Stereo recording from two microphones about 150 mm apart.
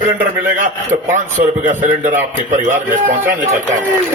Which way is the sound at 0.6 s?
60° right (ahead or behind).